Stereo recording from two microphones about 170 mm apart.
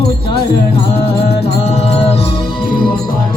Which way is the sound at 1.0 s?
35° left (ahead or behind).